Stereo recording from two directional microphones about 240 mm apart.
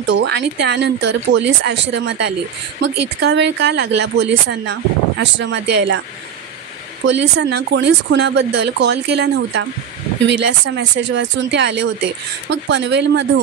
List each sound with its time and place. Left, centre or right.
0.0 s speech: right
7.1 s speech: right